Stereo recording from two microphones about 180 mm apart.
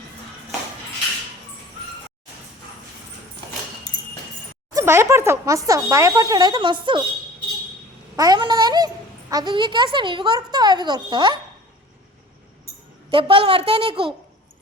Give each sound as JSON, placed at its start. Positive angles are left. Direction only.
{"t": 4.7, "sound": "speech", "side_deg": -15}
{"t": 8.1, "sound": "a child's voice", "side_deg": -20}
{"t": 13.1, "sound": "speech", "side_deg": -30}